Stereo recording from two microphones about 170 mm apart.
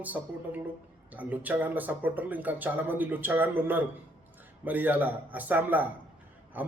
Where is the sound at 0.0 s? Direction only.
10° right (ahead or behind).